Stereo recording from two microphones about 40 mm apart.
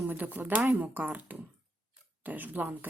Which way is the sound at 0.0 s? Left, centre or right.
Right.